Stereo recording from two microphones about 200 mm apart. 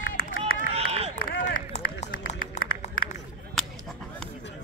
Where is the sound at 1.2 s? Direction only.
45° left (ahead or behind).